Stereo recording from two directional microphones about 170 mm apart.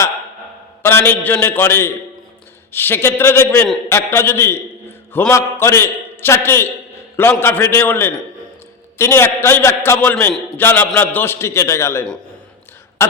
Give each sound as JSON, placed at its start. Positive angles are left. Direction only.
{"t": 0.8, "sound": "a man's voice", "side_deg": 15}
{"t": 13.0, "sound": "throat clearing", "side_deg": 15}